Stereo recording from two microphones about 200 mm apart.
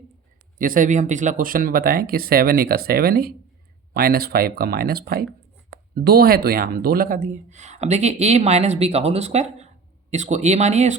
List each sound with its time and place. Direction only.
0.6 s speech: 40° right (ahead or behind)